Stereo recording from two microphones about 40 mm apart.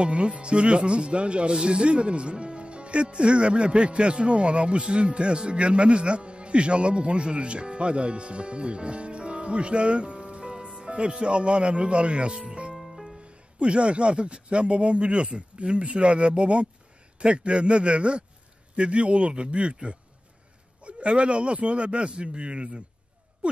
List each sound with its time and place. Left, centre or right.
0.0 s speech: right
12.7 s music: centre
13.6 s speech: right
23.4 s music: right